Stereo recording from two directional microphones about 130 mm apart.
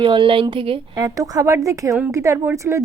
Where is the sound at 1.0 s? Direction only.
30° right (ahead or behind).